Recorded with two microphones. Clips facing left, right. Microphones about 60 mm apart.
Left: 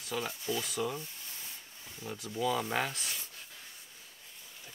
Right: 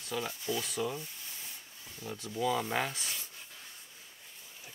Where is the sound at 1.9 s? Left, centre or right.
Centre.